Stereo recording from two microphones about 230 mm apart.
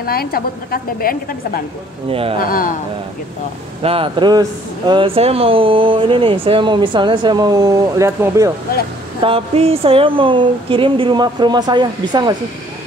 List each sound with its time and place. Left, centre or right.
0.0 s a woman's voice: left
2.0 s speech: right
2.4 s a woman's voice: left
3.8 s speech: right
9.2 s speech: right